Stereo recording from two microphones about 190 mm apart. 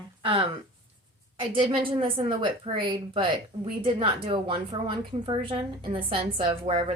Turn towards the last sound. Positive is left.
turn(degrees=-35)  # may be behind; listen again after turning